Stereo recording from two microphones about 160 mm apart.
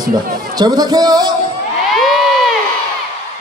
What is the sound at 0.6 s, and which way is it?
Speech, 25° right (ahead or behind).